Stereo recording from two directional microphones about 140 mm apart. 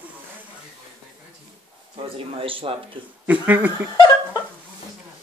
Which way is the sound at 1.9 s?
40° right (ahead or behind).